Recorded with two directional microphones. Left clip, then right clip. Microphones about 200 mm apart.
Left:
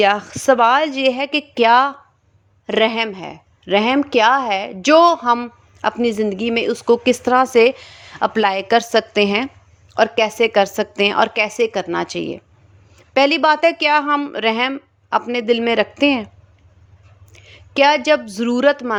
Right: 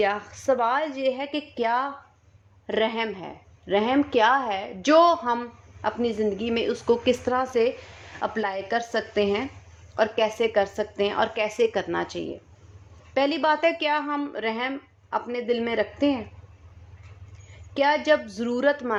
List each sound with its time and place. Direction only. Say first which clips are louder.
0.0 s speech: left 9 dB; 40° left (ahead or behind)
17.7 s speech: left 7 dB; 35° left (ahead or behind)